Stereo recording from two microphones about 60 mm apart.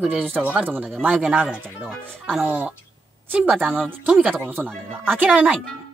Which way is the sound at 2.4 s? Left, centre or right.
Right.